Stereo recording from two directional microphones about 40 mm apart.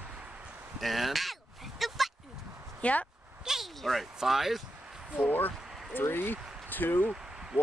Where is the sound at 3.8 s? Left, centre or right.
Centre.